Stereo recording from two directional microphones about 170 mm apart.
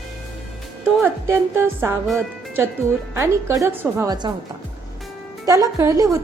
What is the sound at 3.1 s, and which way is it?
A woman's voice, 15° right (ahead or behind).